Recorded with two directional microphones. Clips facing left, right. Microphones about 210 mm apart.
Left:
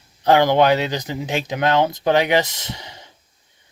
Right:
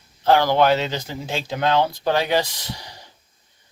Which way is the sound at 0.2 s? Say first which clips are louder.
Left 2 dB; 20° left (ahead or behind).